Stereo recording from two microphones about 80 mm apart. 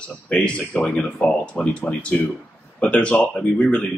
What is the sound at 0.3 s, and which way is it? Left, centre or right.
A man's voice, centre.